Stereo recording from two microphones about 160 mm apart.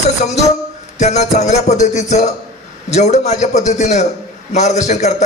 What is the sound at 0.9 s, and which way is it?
Music, 45° left (ahead or behind).